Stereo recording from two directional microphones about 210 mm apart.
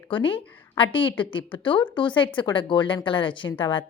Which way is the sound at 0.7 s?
25° left (ahead or behind).